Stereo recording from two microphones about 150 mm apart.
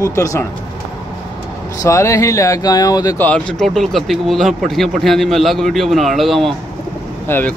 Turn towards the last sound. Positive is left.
turn(degrees=15)  # may be behind; listen again after turning